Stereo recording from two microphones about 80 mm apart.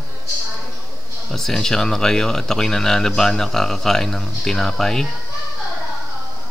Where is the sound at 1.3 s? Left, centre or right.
Centre.